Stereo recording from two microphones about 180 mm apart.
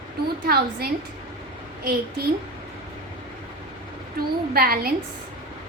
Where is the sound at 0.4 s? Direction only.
60° right (ahead or behind).